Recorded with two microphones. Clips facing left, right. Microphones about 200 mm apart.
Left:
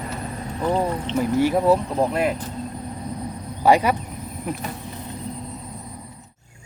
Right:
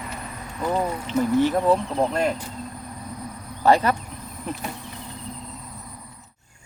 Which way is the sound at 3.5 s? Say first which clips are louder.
Left 1 dB; 10° left (ahead or behind).